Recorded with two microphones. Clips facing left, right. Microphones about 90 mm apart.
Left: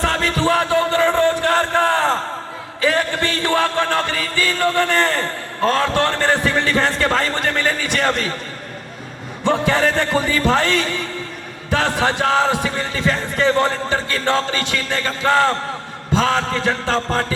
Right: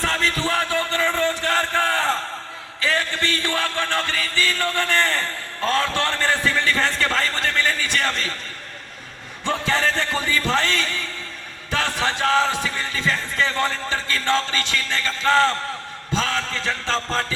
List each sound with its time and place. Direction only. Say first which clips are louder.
0.0 s music: left 4 dB; 25° left (ahead or behind)
1.8 s crowd: left 5 dB; 25° left (ahead or behind)
2.8 s a sound: left 5 dB; 25° left (ahead or behind)
3.8 s speech: left 4 dB; 30° left (ahead or behind)
5.1 s a sound: left 4 dB; 35° left (ahead or behind)
5.7 s speech: left 2 dB; 25° left (ahead or behind)
9.7 s music: left 5 dB; 50° left (ahead or behind)
10.1 s speech: left 5 dB; 30° left (ahead or behind)
16.9 s music: left 2 dB; 20° left (ahead or behind)